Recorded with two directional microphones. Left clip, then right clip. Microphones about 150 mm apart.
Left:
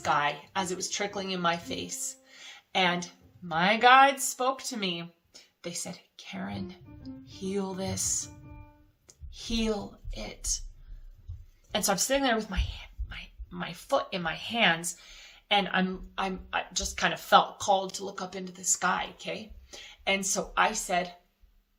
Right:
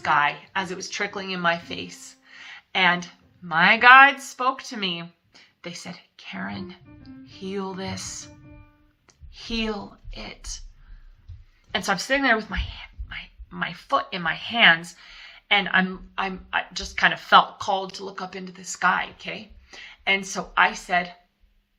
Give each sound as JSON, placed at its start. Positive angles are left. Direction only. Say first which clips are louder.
{"t": 0.0, "sound": "a woman's voice", "louder": "right 6 dB", "side_deg": 45}
{"t": 11.7, "sound": "speech", "louder": "right 4 dB", "side_deg": 40}